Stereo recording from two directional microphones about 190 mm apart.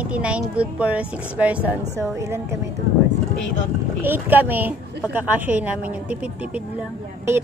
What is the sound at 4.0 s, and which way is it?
A woman's voice, 10° right (ahead or behind).